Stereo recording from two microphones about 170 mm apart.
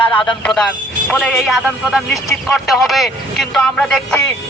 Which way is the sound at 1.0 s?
5° left (ahead or behind).